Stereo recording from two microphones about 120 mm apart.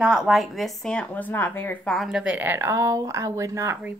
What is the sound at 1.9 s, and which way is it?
Speech, centre (ahead or behind).